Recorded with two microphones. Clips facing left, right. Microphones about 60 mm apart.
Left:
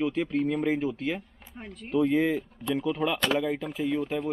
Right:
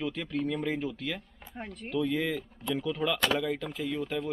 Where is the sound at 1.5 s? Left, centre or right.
Centre.